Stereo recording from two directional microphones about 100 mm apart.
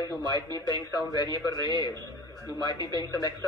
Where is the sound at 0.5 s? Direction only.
45° right (ahead or behind).